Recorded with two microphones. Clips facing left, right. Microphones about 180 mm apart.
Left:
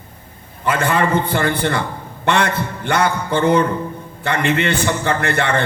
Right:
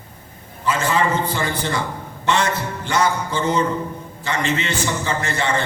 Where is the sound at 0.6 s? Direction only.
60° left (ahead or behind).